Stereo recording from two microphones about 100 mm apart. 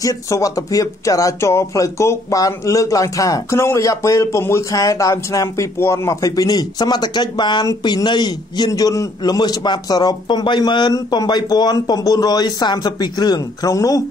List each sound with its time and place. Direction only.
0.0 s a man's voice: 35° left (ahead or behind)